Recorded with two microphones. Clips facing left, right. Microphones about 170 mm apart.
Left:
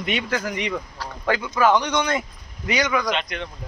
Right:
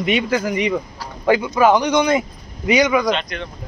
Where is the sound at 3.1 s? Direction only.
15° left (ahead or behind).